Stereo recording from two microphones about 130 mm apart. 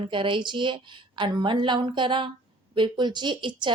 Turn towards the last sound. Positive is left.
turn(degrees=-35)  # may be behind; listen again after turning